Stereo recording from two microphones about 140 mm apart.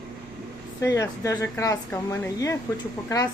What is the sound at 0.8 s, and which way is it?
A woman's voice, 20° left (ahead or behind).